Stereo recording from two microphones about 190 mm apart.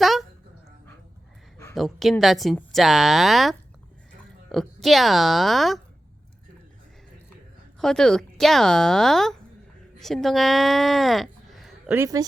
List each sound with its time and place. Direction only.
0.0 s dog: centre (ahead or behind)
1.7 s speech: centre (ahead or behind)
7.8 s speech: centre (ahead or behind)
11.9 s speech: 20° right (ahead or behind)